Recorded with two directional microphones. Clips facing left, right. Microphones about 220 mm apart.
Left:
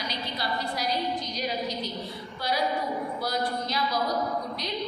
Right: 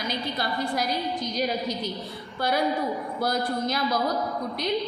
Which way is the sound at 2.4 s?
50° right (ahead or behind).